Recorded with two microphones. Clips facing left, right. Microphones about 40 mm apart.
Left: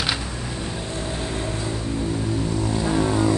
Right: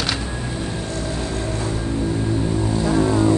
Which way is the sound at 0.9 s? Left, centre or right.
Left.